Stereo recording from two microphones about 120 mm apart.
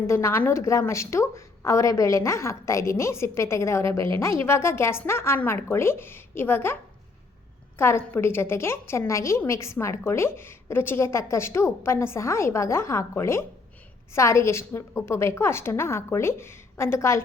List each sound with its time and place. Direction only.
0.1 s a woman's voice: 25° left (ahead or behind)
7.8 s a woman's voice: 20° left (ahead or behind)